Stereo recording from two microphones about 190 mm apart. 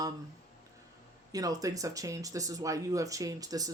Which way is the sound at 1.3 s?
20° right (ahead or behind).